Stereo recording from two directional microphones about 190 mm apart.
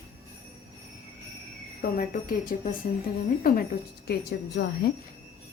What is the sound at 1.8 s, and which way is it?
Speech, 50° left (ahead or behind).